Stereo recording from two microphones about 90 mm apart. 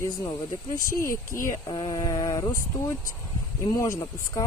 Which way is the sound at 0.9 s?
35° left (ahead or behind).